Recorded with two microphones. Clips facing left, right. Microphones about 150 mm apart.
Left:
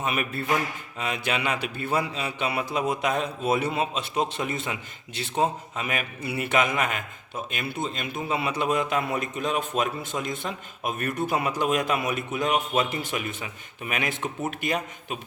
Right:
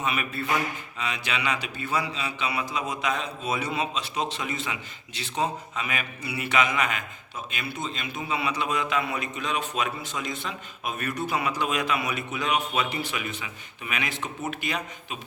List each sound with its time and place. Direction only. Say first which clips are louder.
0.0 s mantra: left 1 dB; 45° left (ahead or behind)